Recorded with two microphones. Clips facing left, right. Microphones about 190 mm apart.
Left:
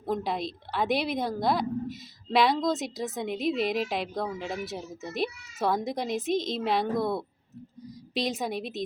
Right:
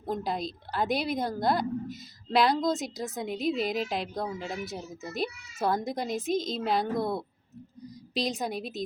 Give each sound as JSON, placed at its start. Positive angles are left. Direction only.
{"t": 0.0, "sound": "a woman's voice", "side_deg": 0}